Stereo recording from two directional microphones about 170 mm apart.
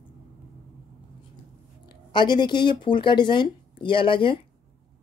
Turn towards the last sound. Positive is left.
turn(degrees=30)  # may be behind; listen again after turning